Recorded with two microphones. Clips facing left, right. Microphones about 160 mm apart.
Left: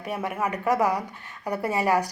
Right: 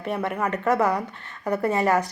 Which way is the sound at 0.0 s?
10° left (ahead or behind).